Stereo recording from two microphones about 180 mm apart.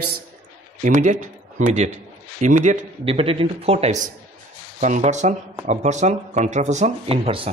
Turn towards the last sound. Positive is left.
turn(degrees=-30)  # may be behind; listen again after turning